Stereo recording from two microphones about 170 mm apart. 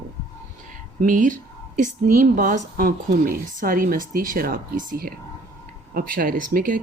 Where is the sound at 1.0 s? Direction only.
50° right (ahead or behind).